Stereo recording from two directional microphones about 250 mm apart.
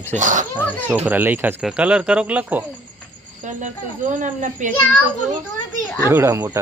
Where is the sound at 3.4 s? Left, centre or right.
Right.